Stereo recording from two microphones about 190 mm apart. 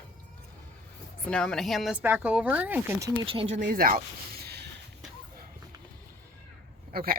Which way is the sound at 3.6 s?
50° right (ahead or behind).